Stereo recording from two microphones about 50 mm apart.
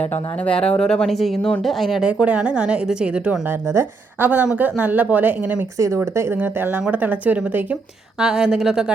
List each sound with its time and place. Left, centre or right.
0.3 s speech: left
1.0 s speech: centre
2.0 s a woman's voice: right
4.2 s speech: right
5.7 s speech: right
6.3 s speech: right
6.9 s speech: right
8.2 s a woman's voice: centre